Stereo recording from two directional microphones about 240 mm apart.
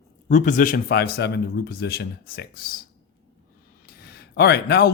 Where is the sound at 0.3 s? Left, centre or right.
Left.